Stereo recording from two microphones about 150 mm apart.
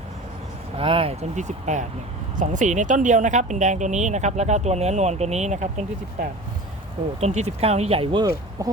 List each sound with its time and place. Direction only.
0.8 s speech: 40° right (ahead or behind)
7.2 s speech: 45° right (ahead or behind)
8.2 s speech: 25° right (ahead or behind)